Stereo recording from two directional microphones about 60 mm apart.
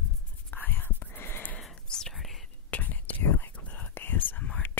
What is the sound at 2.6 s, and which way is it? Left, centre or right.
Whispering, left.